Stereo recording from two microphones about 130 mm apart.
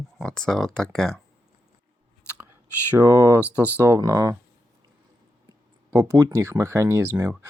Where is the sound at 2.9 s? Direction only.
15° right (ahead or behind).